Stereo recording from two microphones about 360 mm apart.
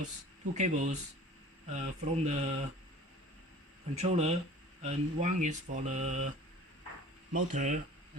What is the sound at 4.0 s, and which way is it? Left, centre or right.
Speech, centre.